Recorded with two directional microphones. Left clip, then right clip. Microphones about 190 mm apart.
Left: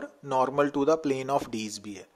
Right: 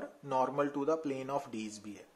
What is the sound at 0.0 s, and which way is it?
Speech, 35° left (ahead or behind).